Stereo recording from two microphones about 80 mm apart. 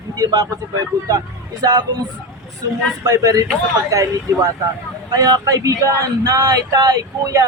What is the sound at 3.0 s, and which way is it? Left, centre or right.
Speech, right.